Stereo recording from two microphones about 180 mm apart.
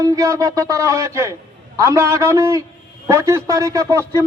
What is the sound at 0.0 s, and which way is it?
A man's voice, 20° right (ahead or behind).